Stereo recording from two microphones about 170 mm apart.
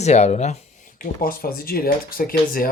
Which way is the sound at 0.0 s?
40° left (ahead or behind).